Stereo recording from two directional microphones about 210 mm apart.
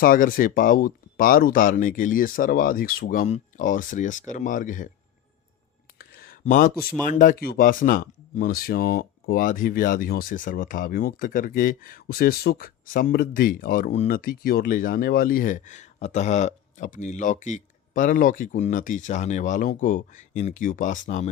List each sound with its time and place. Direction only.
0.0 s speech: 45° left (ahead or behind)
6.0 s a sound: 45° left (ahead or behind)
7.1 s speech: 40° left (ahead or behind)